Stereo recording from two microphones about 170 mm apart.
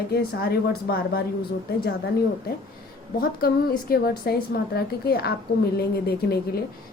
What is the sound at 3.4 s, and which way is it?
A woman's voice, 65° left (ahead or behind).